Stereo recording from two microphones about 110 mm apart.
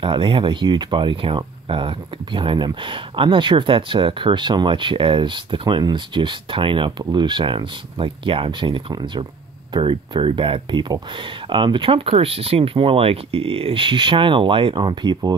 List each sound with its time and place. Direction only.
0.0 s speech: 50° right (ahead or behind)